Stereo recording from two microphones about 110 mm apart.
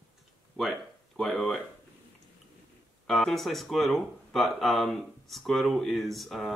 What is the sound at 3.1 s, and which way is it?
Speech, 5° left (ahead or behind).